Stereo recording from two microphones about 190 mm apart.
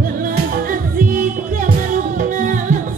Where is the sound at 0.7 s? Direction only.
45° right (ahead or behind).